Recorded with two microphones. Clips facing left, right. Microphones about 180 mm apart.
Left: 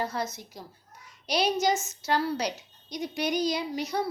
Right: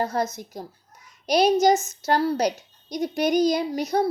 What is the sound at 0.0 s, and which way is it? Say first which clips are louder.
A woman's voice: right 6 dB; 45° right (ahead or behind).